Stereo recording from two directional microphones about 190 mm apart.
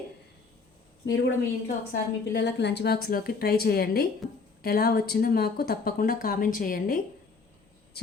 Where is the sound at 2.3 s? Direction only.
65° left (ahead or behind).